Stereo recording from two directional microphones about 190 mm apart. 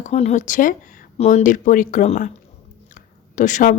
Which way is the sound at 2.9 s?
40° left (ahead or behind).